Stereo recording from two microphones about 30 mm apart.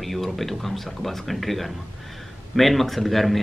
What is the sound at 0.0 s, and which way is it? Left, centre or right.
Speech, centre.